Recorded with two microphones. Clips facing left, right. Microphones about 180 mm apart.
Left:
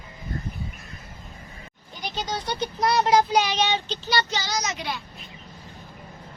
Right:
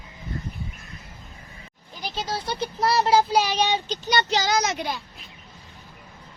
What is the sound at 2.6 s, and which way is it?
Speech, 5° right (ahead or behind).